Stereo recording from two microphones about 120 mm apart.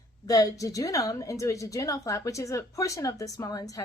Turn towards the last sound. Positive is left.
turn(degrees=30)  # may be behind; listen again after turning